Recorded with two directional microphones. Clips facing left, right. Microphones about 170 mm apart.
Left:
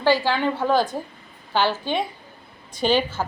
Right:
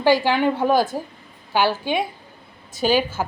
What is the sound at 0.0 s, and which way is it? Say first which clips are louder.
A woman's voice: right 3 dB; 15° right (ahead or behind).